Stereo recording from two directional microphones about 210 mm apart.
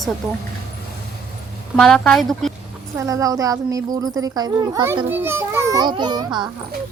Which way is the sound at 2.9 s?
15° right (ahead or behind).